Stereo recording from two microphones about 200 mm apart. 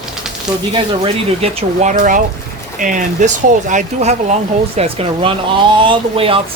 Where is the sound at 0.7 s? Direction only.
30° right (ahead or behind).